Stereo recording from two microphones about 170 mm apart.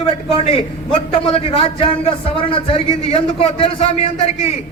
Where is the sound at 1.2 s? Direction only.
30° left (ahead or behind).